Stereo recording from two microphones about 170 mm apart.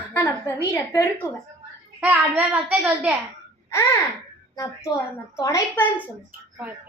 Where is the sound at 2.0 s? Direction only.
10° right (ahead or behind).